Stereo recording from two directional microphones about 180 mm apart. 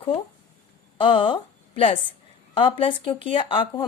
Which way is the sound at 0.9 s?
30° left (ahead or behind).